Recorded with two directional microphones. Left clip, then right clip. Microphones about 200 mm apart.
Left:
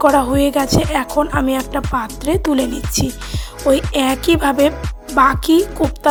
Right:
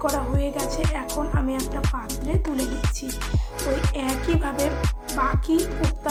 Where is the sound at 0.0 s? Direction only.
50° left (ahead or behind).